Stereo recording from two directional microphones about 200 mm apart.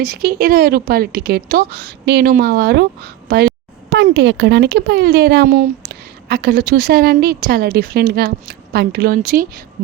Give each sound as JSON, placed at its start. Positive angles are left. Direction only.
{"t": 0.0, "sound": "a woman's voice", "side_deg": -50}
{"t": 3.8, "sound": "a woman's voice", "side_deg": -60}